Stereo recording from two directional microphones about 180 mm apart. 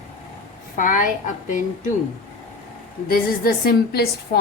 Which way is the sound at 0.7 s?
50° left (ahead or behind).